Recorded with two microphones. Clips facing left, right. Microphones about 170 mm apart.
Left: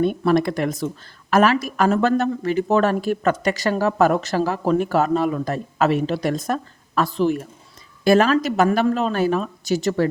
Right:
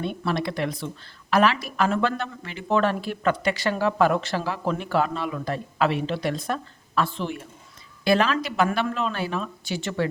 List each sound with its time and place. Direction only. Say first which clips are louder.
0.0 s speech: left 9 dB; 45° left (ahead or behind)